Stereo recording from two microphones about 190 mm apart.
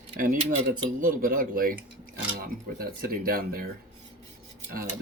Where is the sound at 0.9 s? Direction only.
45° right (ahead or behind).